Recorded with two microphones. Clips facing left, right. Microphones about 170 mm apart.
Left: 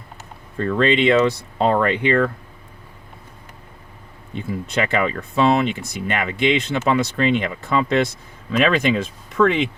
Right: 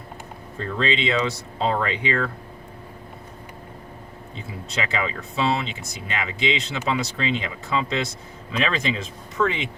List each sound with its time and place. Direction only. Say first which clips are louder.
0.6 s speech: left 7 dB; 60° left (ahead or behind)
4.4 s speech: left 7 dB; 55° left (ahead or behind)